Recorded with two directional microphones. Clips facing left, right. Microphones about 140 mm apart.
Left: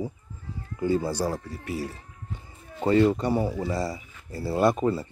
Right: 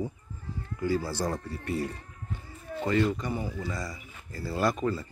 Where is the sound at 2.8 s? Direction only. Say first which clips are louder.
Left 6 dB; 30° left (ahead or behind).